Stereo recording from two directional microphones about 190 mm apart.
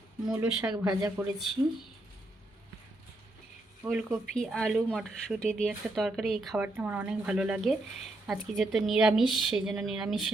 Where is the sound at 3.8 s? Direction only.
5° right (ahead or behind).